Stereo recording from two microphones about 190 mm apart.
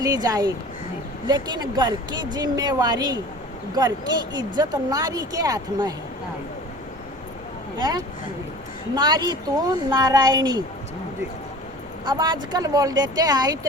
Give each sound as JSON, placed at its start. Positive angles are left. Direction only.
{"t": 0.0, "sound": "speech", "side_deg": -20}
{"t": 7.8, "sound": "speech", "side_deg": -20}
{"t": 12.0, "sound": "speech", "side_deg": -20}